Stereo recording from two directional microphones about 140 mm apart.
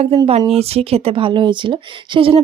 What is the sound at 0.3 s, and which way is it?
Speech, 45° right (ahead or behind).